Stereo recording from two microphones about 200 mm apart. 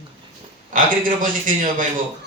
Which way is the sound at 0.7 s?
40° right (ahead or behind).